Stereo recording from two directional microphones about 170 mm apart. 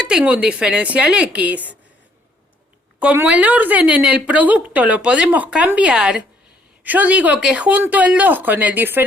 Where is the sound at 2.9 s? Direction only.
10° right (ahead or behind).